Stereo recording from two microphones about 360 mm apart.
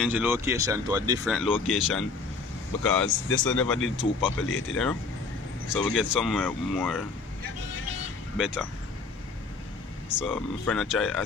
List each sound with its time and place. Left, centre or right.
0.0 s speech: centre
3.1 s speech: left
3.4 s speech: centre
4.5 s speech: left
5.7 s speech: centre
8.4 s speech: centre
10.0 s speech: centre